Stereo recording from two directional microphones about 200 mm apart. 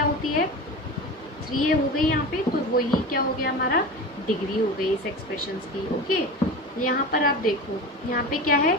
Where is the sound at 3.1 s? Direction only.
50° left (ahead or behind).